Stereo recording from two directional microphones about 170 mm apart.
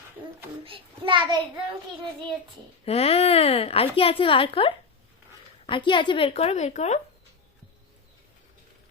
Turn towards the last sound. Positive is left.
turn(degrees=40)  # may be behind; listen again after turning